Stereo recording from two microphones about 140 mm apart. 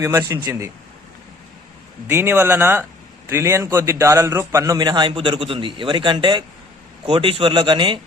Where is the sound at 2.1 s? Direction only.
15° right (ahead or behind).